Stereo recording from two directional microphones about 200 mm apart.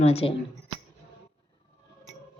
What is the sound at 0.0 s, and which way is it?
Speech, 30° left (ahead or behind).